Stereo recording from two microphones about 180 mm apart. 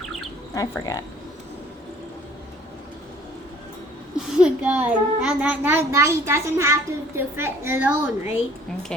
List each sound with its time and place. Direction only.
0.0 s a sound: centre (ahead or behind)
0.5 s speech: 20° left (ahead or behind)
4.4 s a child's voice: 5° right (ahead or behind)